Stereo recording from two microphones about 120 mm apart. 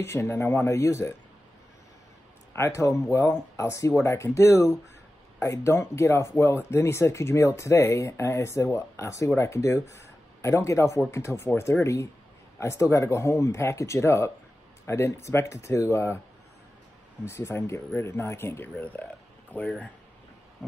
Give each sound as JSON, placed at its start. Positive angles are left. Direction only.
{"t": 0.0, "sound": "speech", "side_deg": 20}
{"t": 2.5, "sound": "speech", "side_deg": 25}
{"t": 17.3, "sound": "speech", "side_deg": 20}